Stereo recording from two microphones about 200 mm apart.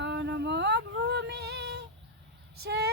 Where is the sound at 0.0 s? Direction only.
60° right (ahead or behind).